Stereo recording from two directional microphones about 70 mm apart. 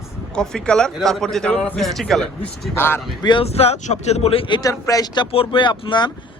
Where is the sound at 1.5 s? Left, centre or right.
Centre.